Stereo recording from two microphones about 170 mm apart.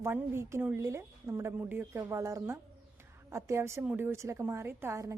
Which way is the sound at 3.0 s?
15° right (ahead or behind).